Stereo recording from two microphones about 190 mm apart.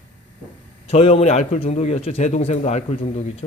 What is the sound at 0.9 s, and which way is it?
A man's voice, 35° left (ahead or behind).